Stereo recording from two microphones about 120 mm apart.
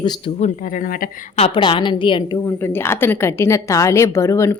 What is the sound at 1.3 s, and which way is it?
Speech, 55° left (ahead or behind).